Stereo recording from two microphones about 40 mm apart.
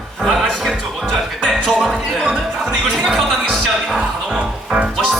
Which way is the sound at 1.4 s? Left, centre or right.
Centre.